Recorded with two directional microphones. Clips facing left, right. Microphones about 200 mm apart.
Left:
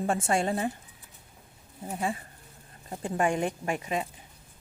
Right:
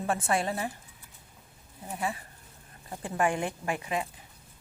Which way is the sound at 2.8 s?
25° left (ahead or behind).